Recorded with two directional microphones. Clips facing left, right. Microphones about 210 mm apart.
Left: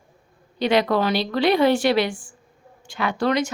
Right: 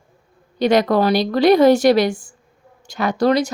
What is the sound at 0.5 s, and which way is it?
A woman's voice, 45° right (ahead or behind).